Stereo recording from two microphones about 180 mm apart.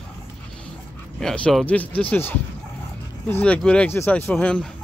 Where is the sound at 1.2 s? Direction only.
5° left (ahead or behind).